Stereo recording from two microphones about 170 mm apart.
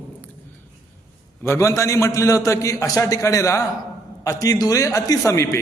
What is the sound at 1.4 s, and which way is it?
A man's voice, 15° left (ahead or behind).